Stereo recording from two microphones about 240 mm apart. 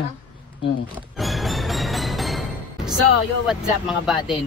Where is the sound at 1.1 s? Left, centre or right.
Centre.